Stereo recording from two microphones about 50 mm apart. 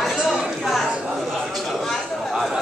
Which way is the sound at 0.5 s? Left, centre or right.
Centre.